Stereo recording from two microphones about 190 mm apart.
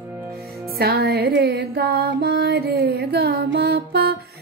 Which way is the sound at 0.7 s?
55° right (ahead or behind).